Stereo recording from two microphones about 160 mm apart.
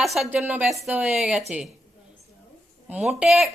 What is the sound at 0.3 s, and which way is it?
A woman's voice, 10° right (ahead or behind).